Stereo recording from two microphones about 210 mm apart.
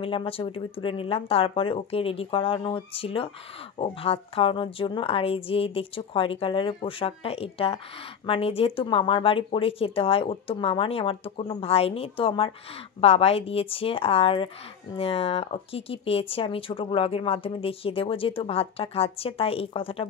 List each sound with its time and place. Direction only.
0.0 s speech: 25° left (ahead or behind)